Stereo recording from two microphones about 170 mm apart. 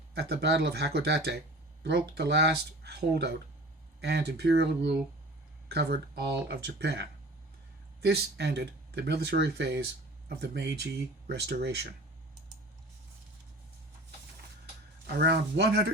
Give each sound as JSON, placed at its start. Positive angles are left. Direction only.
{"t": 0.1, "sound": "speech", "side_deg": -75}
{"t": 15.0, "sound": "speech", "side_deg": -75}